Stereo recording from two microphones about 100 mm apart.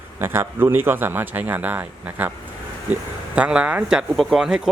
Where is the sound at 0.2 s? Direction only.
25° right (ahead or behind).